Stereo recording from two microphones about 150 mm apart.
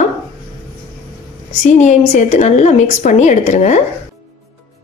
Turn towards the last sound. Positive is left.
turn(degrees=50)  # may be behind; listen again after turning